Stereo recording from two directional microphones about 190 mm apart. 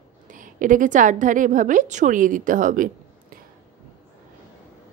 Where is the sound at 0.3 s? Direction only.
45° right (ahead or behind).